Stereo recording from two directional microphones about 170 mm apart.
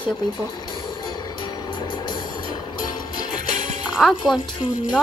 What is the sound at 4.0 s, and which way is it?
Speech, centre (ahead or behind).